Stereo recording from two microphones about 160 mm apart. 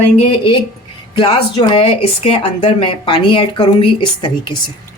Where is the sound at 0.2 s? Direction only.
35° left (ahead or behind).